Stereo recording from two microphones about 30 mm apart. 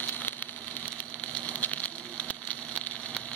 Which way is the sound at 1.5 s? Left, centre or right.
Left.